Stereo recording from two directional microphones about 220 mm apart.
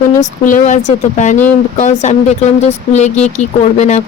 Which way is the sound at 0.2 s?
35° left (ahead or behind).